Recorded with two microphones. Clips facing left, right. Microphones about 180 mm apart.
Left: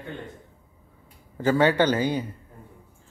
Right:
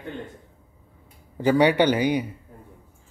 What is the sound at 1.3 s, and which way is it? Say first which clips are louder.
Speech: right 2 dB; 15° right (ahead or behind).